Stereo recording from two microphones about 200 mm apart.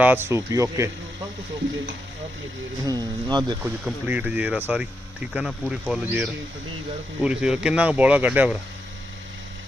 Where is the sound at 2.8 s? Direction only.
20° right (ahead or behind).